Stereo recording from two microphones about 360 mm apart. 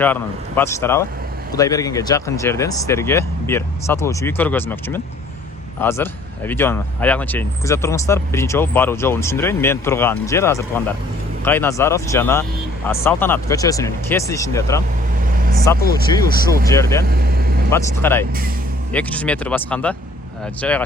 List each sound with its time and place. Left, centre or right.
0.0 s speech: centre
15.9 s speech: centre
17.1 s vehicle: right
17.7 s speech: centre